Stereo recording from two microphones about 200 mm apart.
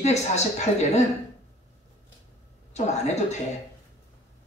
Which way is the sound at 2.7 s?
35° left (ahead or behind).